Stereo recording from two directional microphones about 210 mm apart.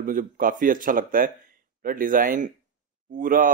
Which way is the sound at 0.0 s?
40° right (ahead or behind).